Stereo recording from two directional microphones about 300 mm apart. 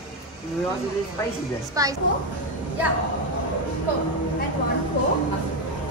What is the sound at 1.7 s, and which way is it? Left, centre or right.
Speech, centre.